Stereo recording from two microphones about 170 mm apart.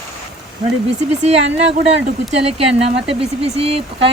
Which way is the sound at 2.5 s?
35° right (ahead or behind).